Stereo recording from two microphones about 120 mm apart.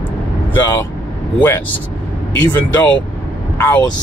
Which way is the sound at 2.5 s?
15° left (ahead or behind).